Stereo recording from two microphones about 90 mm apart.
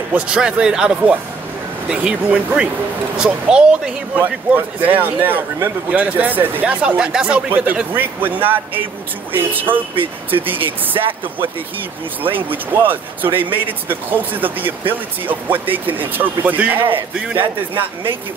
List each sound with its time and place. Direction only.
0.1 s speech: 10° right (ahead or behind)
4.2 s speech: 20° right (ahead or behind)
10.6 s speech: 80° right
12.4 s speech: 20° right (ahead or behind)
16.8 s speech: 75° right (ahead or behind)